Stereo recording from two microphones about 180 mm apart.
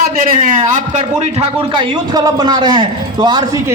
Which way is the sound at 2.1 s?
20° right (ahead or behind).